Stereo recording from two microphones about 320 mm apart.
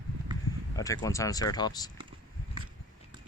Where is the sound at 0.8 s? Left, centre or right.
Centre.